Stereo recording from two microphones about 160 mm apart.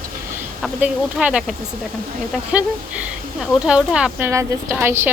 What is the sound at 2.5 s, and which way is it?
Speech, 5° right (ahead or behind).